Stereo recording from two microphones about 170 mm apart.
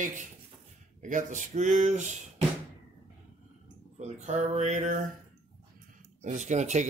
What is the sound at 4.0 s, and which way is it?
Speech, 40° right (ahead or behind).